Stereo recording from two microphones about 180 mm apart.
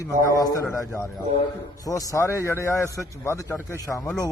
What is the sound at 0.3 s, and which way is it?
Speech, 20° left (ahead or behind).